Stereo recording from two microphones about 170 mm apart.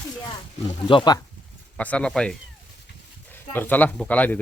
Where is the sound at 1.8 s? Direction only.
5° left (ahead or behind).